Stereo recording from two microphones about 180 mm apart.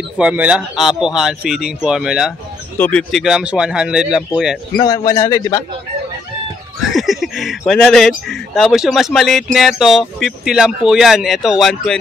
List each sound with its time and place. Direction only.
0.2 s speech: 5° right (ahead or behind)
4.7 s a man's voice: 20° left (ahead or behind)
6.8 s speech: centre (ahead or behind)